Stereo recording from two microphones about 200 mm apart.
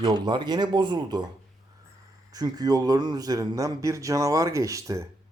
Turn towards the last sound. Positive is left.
turn(degrees=-15)  # may be behind; listen again after turning